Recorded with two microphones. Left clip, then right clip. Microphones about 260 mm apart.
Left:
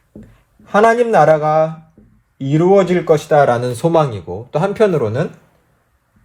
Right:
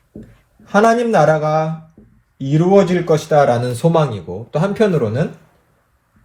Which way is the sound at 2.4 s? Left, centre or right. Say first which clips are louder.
Left 1 dB; left.